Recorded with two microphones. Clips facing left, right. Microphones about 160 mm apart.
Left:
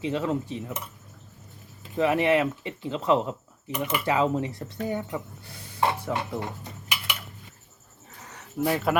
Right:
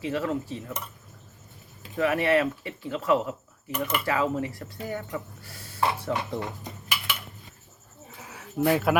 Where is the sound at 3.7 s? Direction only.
10° left (ahead or behind).